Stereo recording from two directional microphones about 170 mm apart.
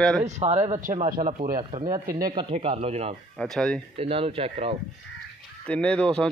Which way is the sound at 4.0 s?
35° right (ahead or behind).